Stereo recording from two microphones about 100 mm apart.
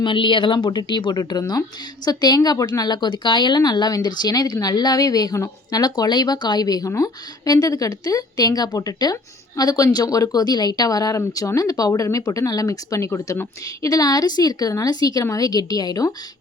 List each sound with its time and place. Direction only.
0.0 s a woman's voice: 55° left (ahead or behind); by 16.1 s 40° left (ahead or behind)